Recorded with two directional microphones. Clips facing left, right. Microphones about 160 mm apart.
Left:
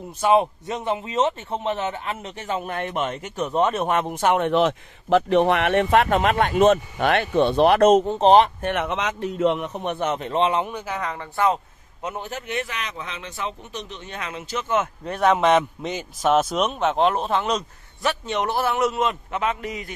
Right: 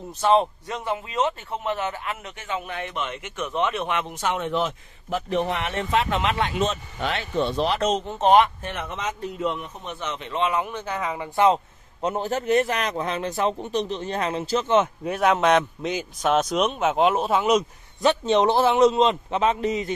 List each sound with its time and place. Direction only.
0.2 s a man's voice: 15° left (ahead or behind); by 8.0 s 55° left (ahead or behind)
8.0 s speech: 35° left (ahead or behind)
8.6 s a man's voice: 70° left (ahead or behind); by 10.7 s 30° left (ahead or behind)
10.7 s speech: 10° left (ahead or behind)
11.0 s speech: 5° right (ahead or behind)
11.3 s a man's voice: 20° right (ahead or behind)
12.0 s a man's voice: 35° right (ahead or behind)
15.0 s speech: centre (ahead or behind)
18.0 s a man's voice: 25° right (ahead or behind)